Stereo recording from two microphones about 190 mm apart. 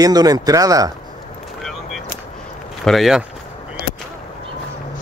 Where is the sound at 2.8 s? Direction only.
Centre (ahead or behind).